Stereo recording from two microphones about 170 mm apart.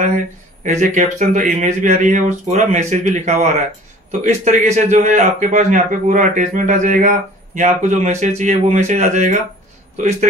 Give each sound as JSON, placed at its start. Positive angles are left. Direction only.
{"t": 0.7, "sound": "a man's voice", "side_deg": -45}